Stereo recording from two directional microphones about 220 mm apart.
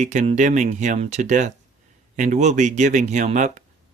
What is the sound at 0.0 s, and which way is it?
Speech, 35° right (ahead or behind).